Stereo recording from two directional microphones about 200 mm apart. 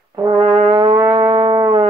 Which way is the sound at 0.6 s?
20° right (ahead or behind).